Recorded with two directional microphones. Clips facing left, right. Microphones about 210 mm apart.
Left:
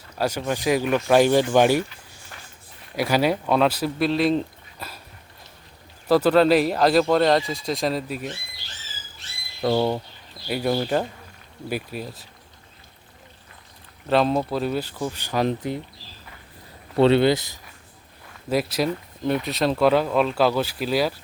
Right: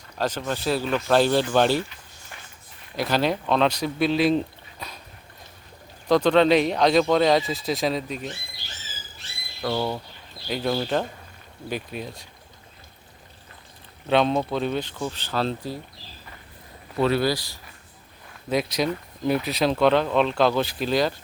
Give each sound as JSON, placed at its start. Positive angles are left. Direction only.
{"t": 0.2, "sound": "speech", "side_deg": 10}
{"t": 2.9, "sound": "speech", "side_deg": 10}
{"t": 6.1, "sound": "speech", "side_deg": 5}
{"t": 9.6, "sound": "speech", "side_deg": 25}
{"t": 10.5, "sound": "speech", "side_deg": 10}
{"t": 14.1, "sound": "speech", "side_deg": 0}
{"t": 17.0, "sound": "speech", "side_deg": 25}
{"t": 18.4, "sound": "speech", "side_deg": 5}